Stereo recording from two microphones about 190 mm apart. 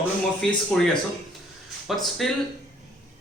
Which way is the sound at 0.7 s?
5° left (ahead or behind).